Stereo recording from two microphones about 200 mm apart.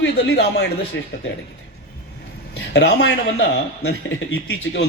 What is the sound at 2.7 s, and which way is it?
Speech, 55° left (ahead or behind).